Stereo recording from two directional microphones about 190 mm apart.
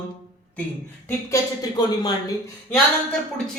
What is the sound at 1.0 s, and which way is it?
Speech, 20° left (ahead or behind).